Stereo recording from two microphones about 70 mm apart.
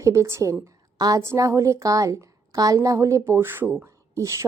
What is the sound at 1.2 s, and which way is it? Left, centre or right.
A woman's voice, right.